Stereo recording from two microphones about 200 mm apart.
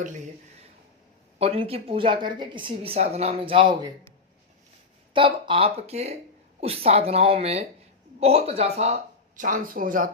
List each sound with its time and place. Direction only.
1.4 s a woman's voice: 30° right (ahead or behind)
5.1 s a woman's voice: 25° right (ahead or behind); by 10.1 s 45° right (ahead or behind)